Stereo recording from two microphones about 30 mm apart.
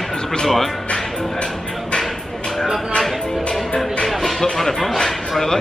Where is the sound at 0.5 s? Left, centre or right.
Centre.